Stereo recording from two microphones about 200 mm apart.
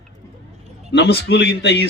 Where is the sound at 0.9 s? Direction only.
60° left (ahead or behind).